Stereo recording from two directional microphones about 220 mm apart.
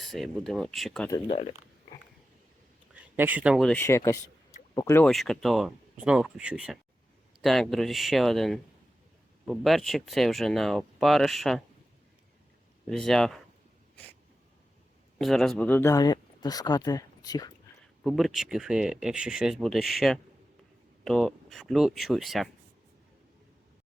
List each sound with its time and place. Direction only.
0.0 s speech: centre (ahead or behind)
1.1 s speech: 25° left (ahead or behind)
2.9 s speech: 5° right (ahead or behind)
12.9 s speech: centre (ahead or behind)
15.2 s speech: centre (ahead or behind); by 17.5 s 15° left (ahead or behind)
18.0 s speech: centre (ahead or behind)